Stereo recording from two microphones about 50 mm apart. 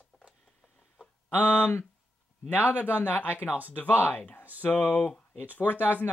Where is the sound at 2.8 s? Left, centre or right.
Left.